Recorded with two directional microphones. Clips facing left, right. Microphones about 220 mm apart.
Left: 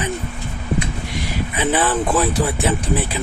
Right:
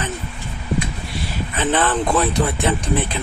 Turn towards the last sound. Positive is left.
turn(degrees=5)  # may be behind; listen again after turning